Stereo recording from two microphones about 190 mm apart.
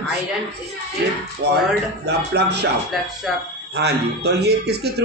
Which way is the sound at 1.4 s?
60° right (ahead or behind).